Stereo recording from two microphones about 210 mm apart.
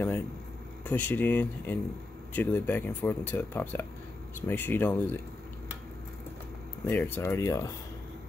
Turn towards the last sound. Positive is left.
turn(degrees=15)  # may be behind; listen again after turning